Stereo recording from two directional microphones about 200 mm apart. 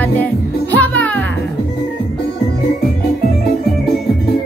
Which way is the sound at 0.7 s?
5° left (ahead or behind).